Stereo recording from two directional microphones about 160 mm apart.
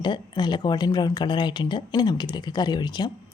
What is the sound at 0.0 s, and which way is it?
A woman's voice, 30° left (ahead or behind).